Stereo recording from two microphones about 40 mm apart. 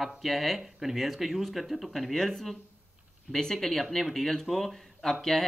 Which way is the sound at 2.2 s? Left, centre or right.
Centre.